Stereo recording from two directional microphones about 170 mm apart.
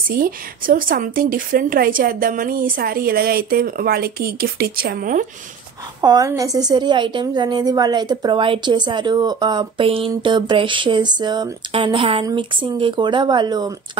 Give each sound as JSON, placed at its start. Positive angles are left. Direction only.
{"t": 0.1, "sound": "speech", "side_deg": -55}
{"t": 5.9, "sound": "a woman's voice", "side_deg": -25}